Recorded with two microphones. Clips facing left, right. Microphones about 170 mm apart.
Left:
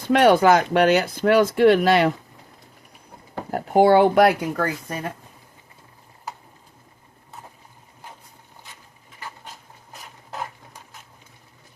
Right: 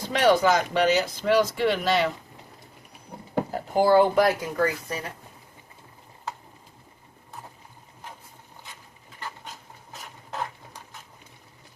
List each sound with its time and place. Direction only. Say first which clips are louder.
0.1 s speech: left 5 dB; 60° left (ahead or behind)
3.5 s speech: left 5 dB; 60° left (ahead or behind)